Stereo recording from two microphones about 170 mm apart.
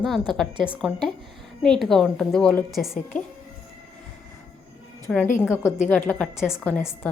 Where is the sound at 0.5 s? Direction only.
30° right (ahead or behind).